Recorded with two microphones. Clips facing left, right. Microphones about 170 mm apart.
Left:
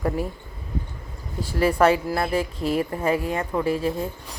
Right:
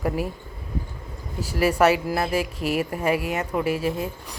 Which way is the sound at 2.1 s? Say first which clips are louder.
Even; 25° right (ahead or behind).